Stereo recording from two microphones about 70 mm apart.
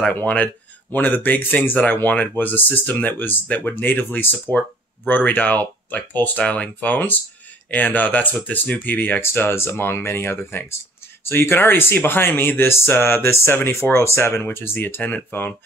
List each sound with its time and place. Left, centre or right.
0.1 s speech: centre; by 14.4 s left
14.4 s speech: left